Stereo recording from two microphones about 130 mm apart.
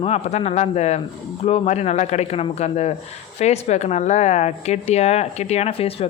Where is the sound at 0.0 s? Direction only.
55° left (ahead or behind).